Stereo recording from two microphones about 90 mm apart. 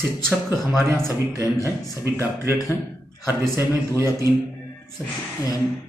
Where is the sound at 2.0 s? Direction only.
30° right (ahead or behind).